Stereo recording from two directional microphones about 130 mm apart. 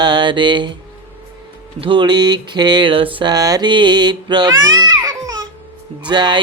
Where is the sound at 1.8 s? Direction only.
40° right (ahead or behind).